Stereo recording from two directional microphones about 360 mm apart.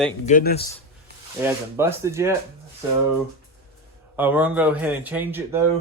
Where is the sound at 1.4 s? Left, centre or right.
Centre.